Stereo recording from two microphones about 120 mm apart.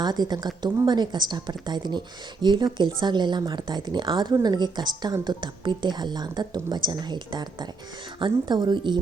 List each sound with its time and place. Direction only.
0.0 s speech: 35° right (ahead or behind)